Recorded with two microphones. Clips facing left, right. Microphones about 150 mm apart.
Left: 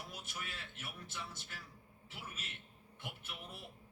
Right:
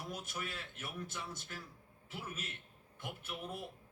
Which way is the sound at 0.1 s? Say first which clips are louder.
Right 5 dB; 45° right (ahead or behind).